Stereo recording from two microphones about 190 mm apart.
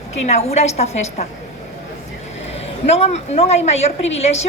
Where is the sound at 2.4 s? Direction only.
35° left (ahead or behind).